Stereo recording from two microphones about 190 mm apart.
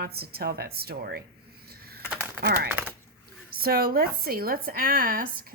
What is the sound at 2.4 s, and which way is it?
Speech, 55° right (ahead or behind).